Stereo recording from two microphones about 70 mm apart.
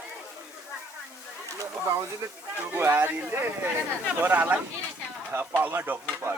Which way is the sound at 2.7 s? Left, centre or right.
Right.